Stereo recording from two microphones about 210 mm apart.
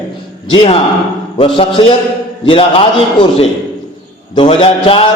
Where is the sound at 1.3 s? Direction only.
25° left (ahead or behind).